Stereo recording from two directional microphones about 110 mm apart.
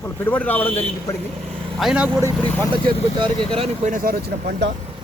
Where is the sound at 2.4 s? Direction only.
15° left (ahead or behind).